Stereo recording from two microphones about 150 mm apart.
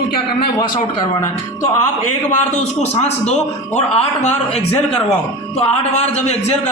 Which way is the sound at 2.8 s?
45° left (ahead or behind).